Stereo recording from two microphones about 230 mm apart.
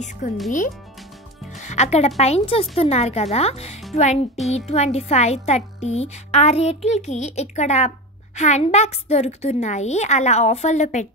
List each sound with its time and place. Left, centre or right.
0.2 s speech: left
1.6 s a child's voice: left